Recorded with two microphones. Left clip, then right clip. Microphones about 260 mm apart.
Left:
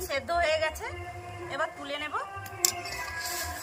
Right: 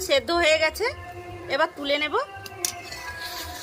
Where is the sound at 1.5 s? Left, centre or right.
Right.